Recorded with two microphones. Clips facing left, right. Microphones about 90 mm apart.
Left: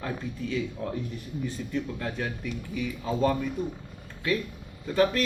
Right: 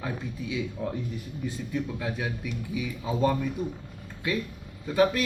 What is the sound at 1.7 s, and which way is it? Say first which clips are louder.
A man's voice: right 1 dB; 10° right (ahead or behind).